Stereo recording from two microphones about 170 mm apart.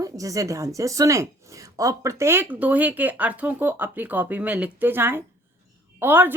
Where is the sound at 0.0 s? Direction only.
20° right (ahead or behind).